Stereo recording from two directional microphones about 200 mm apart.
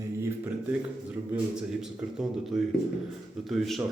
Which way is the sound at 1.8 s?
Centre (ahead or behind).